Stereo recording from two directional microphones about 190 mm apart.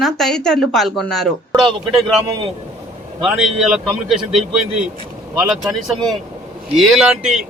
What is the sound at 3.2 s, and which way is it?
A woman's voice, centre (ahead or behind).